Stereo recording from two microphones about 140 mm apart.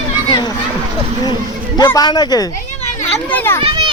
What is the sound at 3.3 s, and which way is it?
Speech, 15° left (ahead or behind).